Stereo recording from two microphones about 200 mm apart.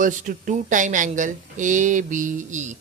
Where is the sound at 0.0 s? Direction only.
40° right (ahead or behind).